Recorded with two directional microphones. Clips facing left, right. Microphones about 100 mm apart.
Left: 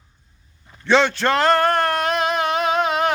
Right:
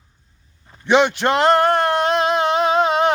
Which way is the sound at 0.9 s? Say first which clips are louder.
Right 2 dB; 15° right (ahead or behind).